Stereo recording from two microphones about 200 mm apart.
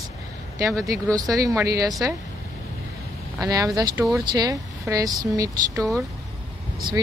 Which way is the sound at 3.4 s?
15° right (ahead or behind).